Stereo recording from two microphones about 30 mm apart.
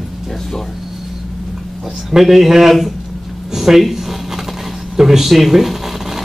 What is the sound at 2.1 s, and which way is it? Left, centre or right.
A man's voice, centre.